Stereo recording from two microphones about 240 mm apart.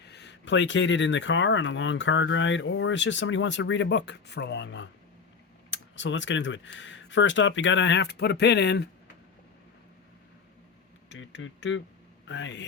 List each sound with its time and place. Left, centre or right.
0.0 s speech: left
11.1 s speech: left